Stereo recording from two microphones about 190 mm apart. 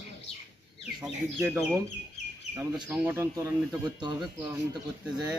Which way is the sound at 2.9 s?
10° right (ahead or behind).